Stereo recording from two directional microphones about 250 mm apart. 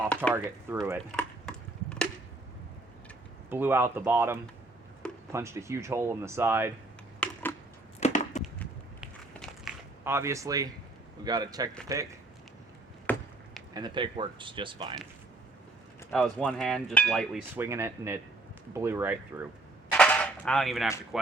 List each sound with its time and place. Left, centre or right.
0.3 s chop: centre
3.5 s speech: centre
7.9 s a sound: left
9.0 s a sound: centre
11.2 s speech: centre
13.1 s chop: centre
13.7 s speech: centre
16.1 s cutlery: centre
17.6 s speech: centre
19.9 s cap gun: centre